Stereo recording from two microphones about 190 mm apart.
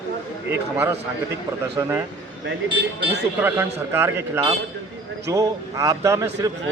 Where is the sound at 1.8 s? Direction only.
15° right (ahead or behind).